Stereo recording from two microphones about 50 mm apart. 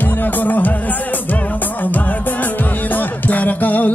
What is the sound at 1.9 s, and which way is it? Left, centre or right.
Music, left.